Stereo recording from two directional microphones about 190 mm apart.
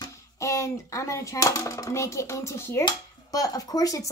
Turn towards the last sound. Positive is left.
turn(degrees=20)  # may be behind; listen again after turning